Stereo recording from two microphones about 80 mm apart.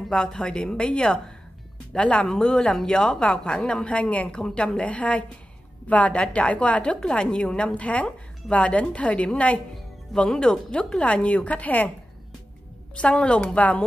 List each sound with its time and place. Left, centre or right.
0.1 s a woman's voice: centre
12.9 s a woman's voice: centre